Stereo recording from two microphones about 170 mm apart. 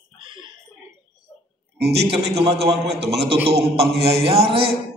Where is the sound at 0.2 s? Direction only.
30° right (ahead or behind).